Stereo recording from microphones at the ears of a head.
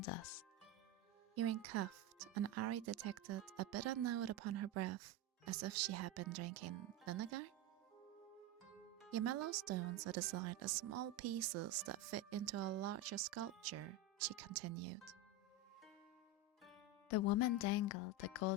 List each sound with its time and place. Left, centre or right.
0.0 s speech: left
1.4 s speech: right
9.0 s speech: right
17.1 s speech: left